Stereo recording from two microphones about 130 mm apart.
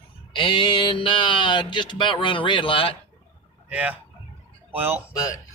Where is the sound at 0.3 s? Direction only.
40° left (ahead or behind).